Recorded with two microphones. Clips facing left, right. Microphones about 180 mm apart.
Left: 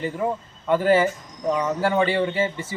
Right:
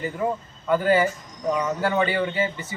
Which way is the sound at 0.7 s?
30° left (ahead or behind).